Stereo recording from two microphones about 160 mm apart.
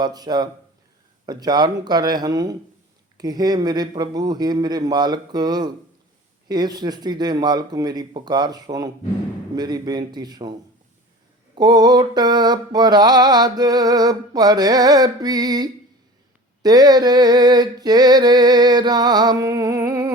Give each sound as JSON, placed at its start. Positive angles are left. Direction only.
{"t": 0.0, "sound": "mantra", "side_deg": -25}
{"t": 11.5, "sound": "mantra", "side_deg": -25}